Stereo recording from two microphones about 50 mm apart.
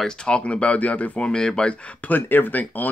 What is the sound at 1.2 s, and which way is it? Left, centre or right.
Speech, centre.